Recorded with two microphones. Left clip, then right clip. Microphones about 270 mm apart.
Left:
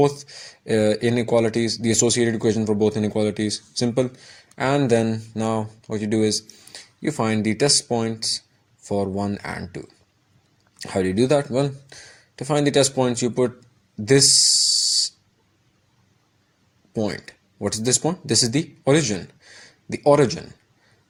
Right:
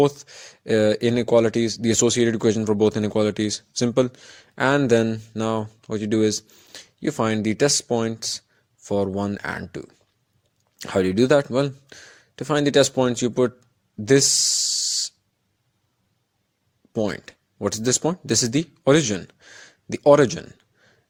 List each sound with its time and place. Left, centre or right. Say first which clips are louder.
0.0 s speech: even; right
14.0 s a sound: left 2 dB; right
16.9 s speech: right 1 dB; right